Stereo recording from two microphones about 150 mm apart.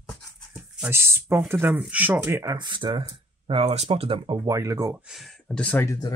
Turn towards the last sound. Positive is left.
turn(degrees=15)  # may be behind; listen again after turning